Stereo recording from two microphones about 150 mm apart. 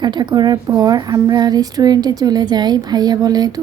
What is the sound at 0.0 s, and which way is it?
A woman's voice, 30° right (ahead or behind).